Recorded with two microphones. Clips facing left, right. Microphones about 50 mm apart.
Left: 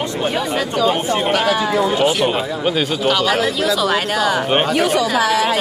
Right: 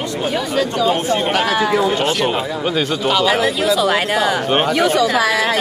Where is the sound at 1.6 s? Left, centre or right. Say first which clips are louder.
Right 1 dB; centre.